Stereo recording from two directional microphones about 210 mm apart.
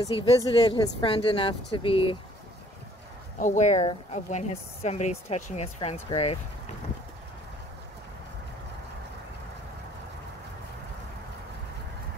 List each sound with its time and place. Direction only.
0.1 s speech: 25° left (ahead or behind)
3.3 s a woman's voice: 35° left (ahead or behind)